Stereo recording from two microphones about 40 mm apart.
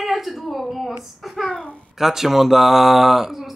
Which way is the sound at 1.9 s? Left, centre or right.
Centre.